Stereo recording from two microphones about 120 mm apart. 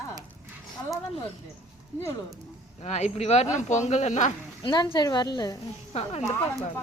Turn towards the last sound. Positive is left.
turn(degrees=60)  # may be behind; listen again after turning